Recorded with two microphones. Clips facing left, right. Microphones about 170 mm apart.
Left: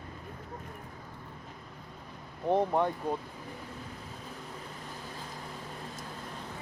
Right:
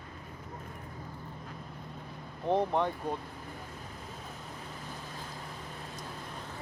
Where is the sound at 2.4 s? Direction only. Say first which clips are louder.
Left 1 dB; 10° left (ahead or behind).